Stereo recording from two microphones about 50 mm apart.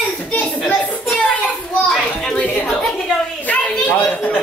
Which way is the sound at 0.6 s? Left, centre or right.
Left.